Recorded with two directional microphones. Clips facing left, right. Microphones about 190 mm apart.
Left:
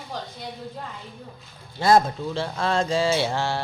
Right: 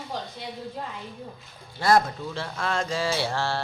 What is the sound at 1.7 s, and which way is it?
Speech, 25° left (ahead or behind).